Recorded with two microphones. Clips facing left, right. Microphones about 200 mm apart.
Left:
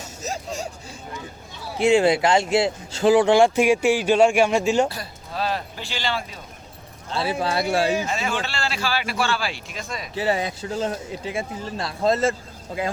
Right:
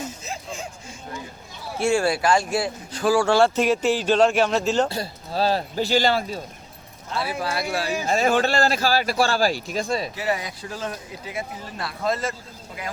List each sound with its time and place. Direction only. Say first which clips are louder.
0.2 s a sound: left 4 dB; 40° left (ahead or behind)
1.8 s speech: left 4 dB; 20° left (ahead or behind)
4.9 s speech: right 4 dB; 30° right (ahead or behind)
7.1 s speech: left 3 dB; 25° left (ahead or behind)
8.0 s speech: right 6 dB; 40° right (ahead or behind)
10.2 s speech: left 3 dB; 30° left (ahead or behind)